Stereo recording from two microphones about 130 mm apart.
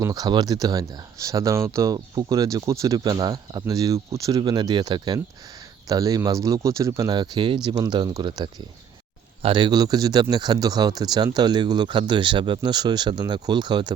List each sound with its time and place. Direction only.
0.0 s speech: 30° right (ahead or behind)